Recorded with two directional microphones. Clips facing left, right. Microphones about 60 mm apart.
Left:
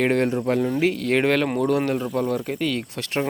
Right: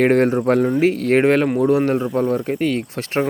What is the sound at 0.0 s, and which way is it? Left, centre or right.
Speech, right.